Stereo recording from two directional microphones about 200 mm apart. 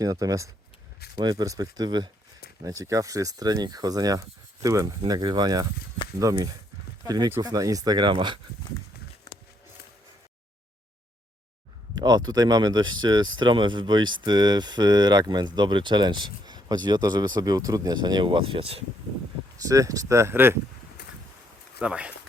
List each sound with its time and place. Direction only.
0.0 s speech: 15° right (ahead or behind)
11.9 s speech: 20° right (ahead or behind)
19.6 s speech: 15° right (ahead or behind)
21.8 s speech: 5° right (ahead or behind)